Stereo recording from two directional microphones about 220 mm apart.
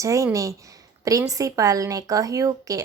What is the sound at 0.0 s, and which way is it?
A woman's voice, 15° right (ahead or behind).